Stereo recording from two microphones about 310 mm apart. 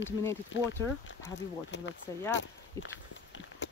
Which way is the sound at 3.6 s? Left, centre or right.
Left.